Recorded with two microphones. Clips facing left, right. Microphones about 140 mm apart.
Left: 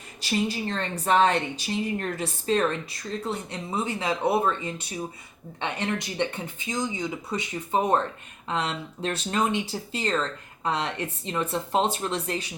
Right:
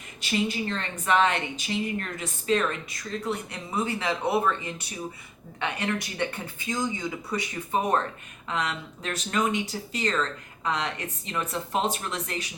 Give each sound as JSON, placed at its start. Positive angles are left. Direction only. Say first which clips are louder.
{"t": 0.2, "sound": "a woman's voice", "louder": "left 1 dB", "side_deg": 35}
{"t": 3.2, "sound": "speech", "louder": "even", "side_deg": 25}